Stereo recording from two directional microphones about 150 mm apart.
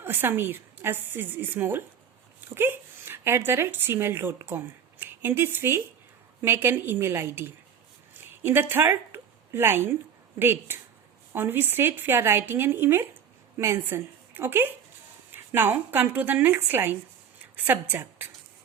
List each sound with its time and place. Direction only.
0.0 s a woman's voice: 15° right (ahead or behind)